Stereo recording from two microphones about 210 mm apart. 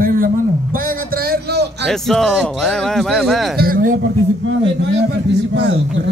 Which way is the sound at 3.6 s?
40° right (ahead or behind).